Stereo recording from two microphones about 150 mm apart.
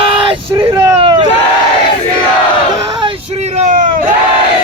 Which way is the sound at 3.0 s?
35° right (ahead or behind).